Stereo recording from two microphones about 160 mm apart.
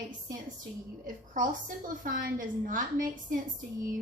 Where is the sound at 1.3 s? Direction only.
55° right (ahead or behind).